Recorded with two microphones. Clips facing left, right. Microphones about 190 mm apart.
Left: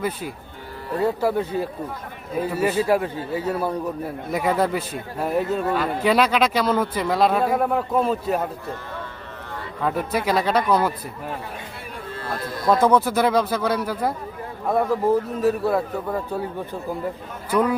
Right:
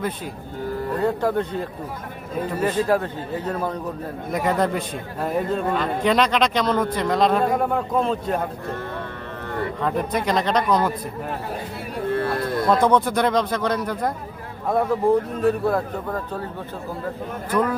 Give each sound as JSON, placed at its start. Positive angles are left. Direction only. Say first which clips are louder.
{"t": 0.9, "sound": "a man's voice", "louder": "left 2 dB", "side_deg": 5}
{"t": 9.5, "sound": "a sound", "louder": "right 9 dB", "side_deg": -55}
{"t": 9.8, "sound": "a man's voice", "louder": "left 2 dB", "side_deg": 5}
{"t": 12.0, "sound": "a sound", "louder": "right 8 dB", "side_deg": -60}
{"t": 12.8, "sound": "a man's voice", "louder": "left 1 dB", "side_deg": 5}
{"t": 17.5, "sound": "a man's voice", "louder": "left 2 dB", "side_deg": 10}